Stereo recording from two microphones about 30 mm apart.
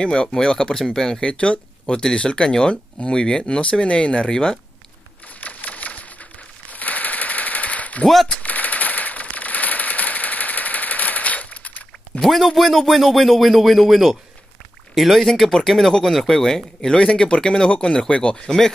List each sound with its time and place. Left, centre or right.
0.0 s speech: left
0.8 s speech: centre
1.2 s speech: left
2.4 s speech: left
5.4 s a sound: left
6.7 s machine gun: left
8.4 s a sound: left
12.2 s speech: centre
15.1 s speech: centre
16.9 s speech: left